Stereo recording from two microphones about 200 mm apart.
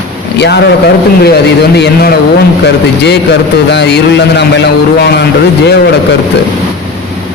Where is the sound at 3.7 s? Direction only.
60° left (ahead or behind).